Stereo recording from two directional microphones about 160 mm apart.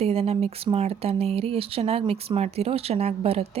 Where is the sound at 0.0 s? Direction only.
40° right (ahead or behind).